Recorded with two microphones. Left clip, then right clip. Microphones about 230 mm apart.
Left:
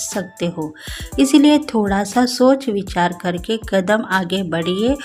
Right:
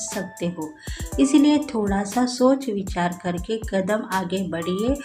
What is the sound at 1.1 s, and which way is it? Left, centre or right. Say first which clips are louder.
Speech: left 5 dB; left.